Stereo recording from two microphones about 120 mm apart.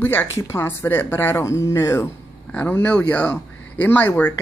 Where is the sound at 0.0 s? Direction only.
15° left (ahead or behind).